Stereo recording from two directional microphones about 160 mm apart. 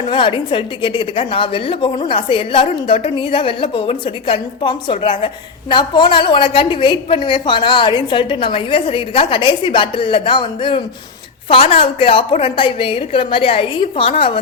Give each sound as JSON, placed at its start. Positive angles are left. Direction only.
{"t": 0.0, "sound": "a woman's voice", "side_deg": 30}